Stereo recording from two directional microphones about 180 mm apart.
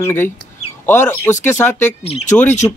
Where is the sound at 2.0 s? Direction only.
35° left (ahead or behind).